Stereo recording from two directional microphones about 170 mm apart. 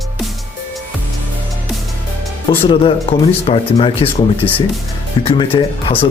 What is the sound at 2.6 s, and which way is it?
Speech, 35° left (ahead or behind).